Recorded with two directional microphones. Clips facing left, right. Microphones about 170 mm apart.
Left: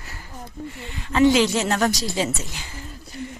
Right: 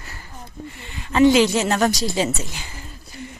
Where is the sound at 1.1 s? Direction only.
15° right (ahead or behind).